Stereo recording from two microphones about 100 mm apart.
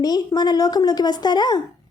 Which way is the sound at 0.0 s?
40° left (ahead or behind).